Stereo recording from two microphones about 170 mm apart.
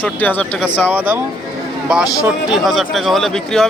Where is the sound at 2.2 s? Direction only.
Centre (ahead or behind).